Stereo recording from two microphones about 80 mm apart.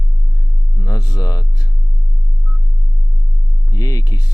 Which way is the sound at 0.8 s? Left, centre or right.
Left.